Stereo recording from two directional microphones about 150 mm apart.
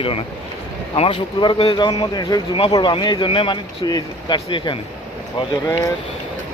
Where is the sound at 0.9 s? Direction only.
35° left (ahead or behind).